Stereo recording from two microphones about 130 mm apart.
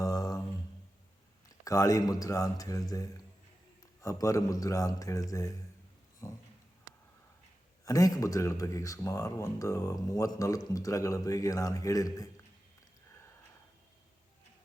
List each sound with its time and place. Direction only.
0.0 s mantra: 25° left (ahead or behind)
1.6 s speech: 25° left (ahead or behind)
4.0 s speech: 25° left (ahead or behind)
7.9 s speech: 25° left (ahead or behind)